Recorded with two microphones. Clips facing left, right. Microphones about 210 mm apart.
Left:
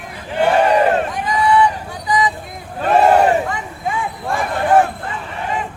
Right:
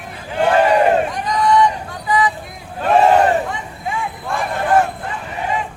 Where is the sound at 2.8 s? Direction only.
Centre (ahead or behind).